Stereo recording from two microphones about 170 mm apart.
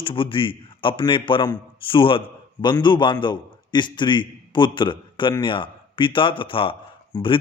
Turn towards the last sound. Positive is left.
turn(degrees=30)  # may be behind; listen again after turning